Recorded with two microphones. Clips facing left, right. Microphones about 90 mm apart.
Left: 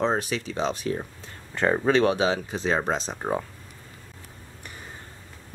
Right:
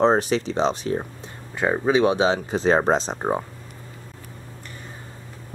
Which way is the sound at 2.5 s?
40° right (ahead or behind).